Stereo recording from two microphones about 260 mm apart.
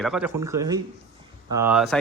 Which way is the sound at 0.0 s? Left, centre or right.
Centre.